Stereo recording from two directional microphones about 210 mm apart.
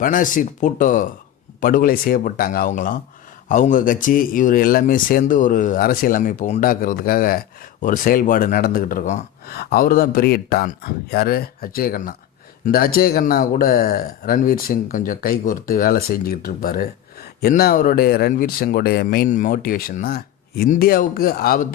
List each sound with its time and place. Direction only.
0.0 s speech: 40° left (ahead or behind)